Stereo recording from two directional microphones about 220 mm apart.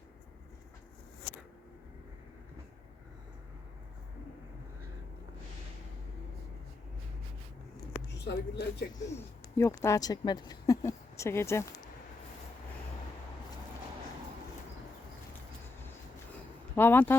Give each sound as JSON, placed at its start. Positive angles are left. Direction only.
{"t": 8.1, "sound": "speech", "side_deg": 50}
{"t": 8.9, "sound": "speech", "side_deg": 15}
{"t": 16.7, "sound": "speech", "side_deg": 10}